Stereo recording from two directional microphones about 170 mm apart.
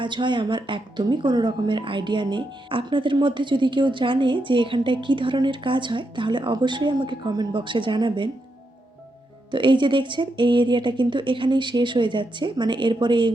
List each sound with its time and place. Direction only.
0.0 s speech: 30° right (ahead or behind)
9.5 s speech: 30° right (ahead or behind)